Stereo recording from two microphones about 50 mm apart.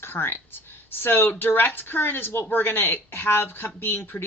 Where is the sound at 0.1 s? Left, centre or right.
Left.